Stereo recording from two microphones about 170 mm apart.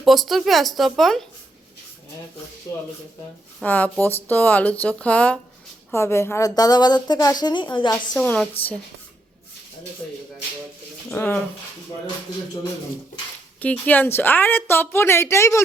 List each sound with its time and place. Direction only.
0.0 s speech: centre (ahead or behind)
2.7 s speech: 20° left (ahead or behind)
3.6 s a woman's voice: 10° left (ahead or behind); by 7.9 s 25° left (ahead or behind)
8.1 s a woman's voice: 5° left (ahead or behind)
11.1 s a woman's voice: 10° left (ahead or behind)
13.6 s a woman's voice: 10° left (ahead or behind)